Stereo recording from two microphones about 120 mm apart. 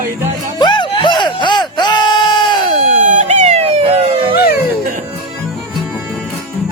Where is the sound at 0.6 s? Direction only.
40° left (ahead or behind).